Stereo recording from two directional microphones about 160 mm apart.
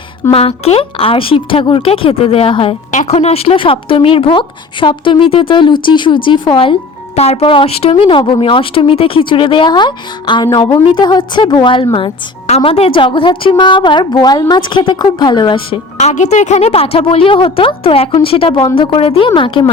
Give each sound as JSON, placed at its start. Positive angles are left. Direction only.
{"t": 0.3, "sound": "speech", "side_deg": 40}
{"t": 2.9, "sound": "a woman's voice", "side_deg": 45}
{"t": 16.0, "sound": "speech", "side_deg": 50}